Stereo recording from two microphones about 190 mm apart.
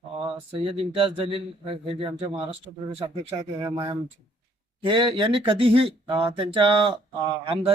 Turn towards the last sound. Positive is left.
turn(degrees=-25)  # may be behind; listen again after turning